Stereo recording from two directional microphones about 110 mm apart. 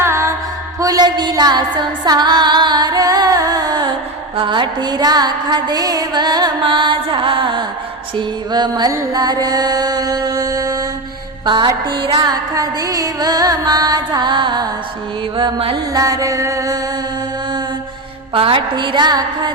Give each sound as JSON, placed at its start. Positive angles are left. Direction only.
{"t": 0.0, "sound": "music", "side_deg": -25}
{"t": 11.4, "sound": "music", "side_deg": -45}
{"t": 15.4, "sound": "music", "side_deg": -50}
{"t": 15.9, "sound": "music", "side_deg": -35}
{"t": 18.3, "sound": "a woman's voice", "side_deg": -55}
{"t": 18.7, "sound": "music", "side_deg": -45}